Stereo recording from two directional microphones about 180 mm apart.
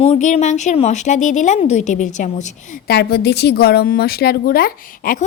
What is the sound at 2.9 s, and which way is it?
A woman's voice, 65° left (ahead or behind).